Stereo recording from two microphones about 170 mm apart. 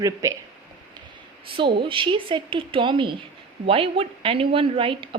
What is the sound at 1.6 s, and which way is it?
A woman's voice, 30° right (ahead or behind).